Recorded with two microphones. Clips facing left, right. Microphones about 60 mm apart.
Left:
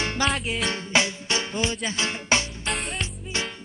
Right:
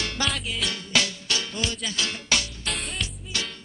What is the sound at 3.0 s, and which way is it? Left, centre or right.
Music, left.